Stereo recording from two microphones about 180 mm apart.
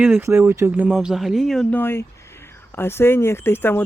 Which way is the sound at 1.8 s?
15° left (ahead or behind).